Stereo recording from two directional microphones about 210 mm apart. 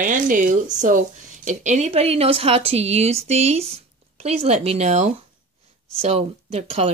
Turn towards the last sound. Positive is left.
turn(degrees=-30)  # may be behind; listen again after turning